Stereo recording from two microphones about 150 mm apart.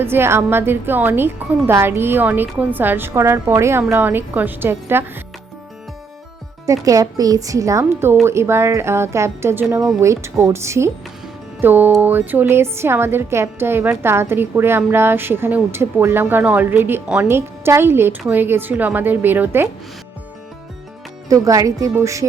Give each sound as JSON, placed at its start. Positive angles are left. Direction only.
{"t": 0.0, "sound": "a woman's voice", "side_deg": -15}
{"t": 6.7, "sound": "a woman's voice", "side_deg": -20}
{"t": 21.2, "sound": "speech", "side_deg": -20}